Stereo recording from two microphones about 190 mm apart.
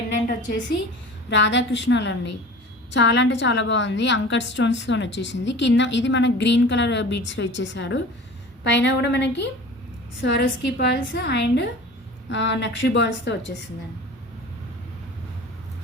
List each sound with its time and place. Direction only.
1.3 s a woman's voice: 70° left (ahead or behind)